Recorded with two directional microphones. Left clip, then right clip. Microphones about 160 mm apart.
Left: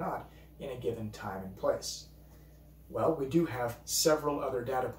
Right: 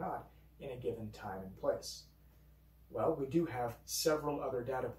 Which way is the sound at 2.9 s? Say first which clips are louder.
Left 5 dB; 5° left (ahead or behind).